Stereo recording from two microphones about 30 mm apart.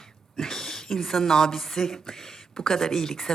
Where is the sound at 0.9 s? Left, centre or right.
Centre.